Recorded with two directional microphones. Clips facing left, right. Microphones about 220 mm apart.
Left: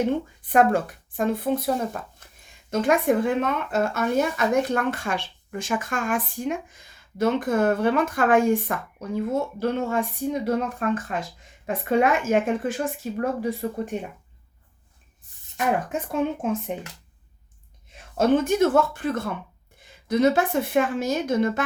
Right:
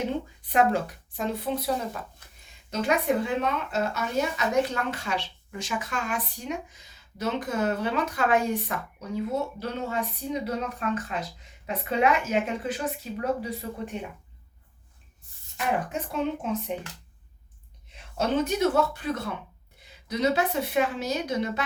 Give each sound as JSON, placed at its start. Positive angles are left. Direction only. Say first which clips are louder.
{"t": 0.4, "sound": "a woman's voice", "louder": "left 4 dB", "side_deg": 50}
{"t": 15.5, "sound": "a woman's voice", "louder": "left 4 dB", "side_deg": 50}
{"t": 18.2, "sound": "a woman's voice", "louder": "left 5 dB", "side_deg": 50}